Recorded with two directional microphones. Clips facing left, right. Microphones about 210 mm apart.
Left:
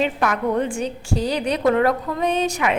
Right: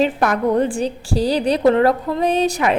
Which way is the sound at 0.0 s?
40° right (ahead or behind).